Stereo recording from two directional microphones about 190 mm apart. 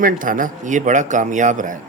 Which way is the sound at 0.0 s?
45° right (ahead or behind).